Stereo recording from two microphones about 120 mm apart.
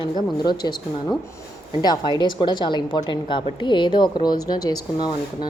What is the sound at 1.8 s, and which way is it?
A woman's voice, 35° left (ahead or behind).